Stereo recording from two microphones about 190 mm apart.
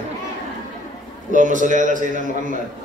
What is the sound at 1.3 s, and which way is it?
Speech, 40° right (ahead or behind).